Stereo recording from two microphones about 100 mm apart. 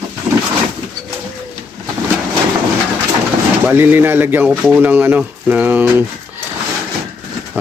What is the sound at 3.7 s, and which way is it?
Speech, 20° right (ahead or behind).